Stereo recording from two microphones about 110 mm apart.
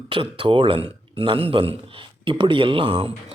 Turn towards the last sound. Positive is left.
turn(degrees=-55)  # may be behind; listen again after turning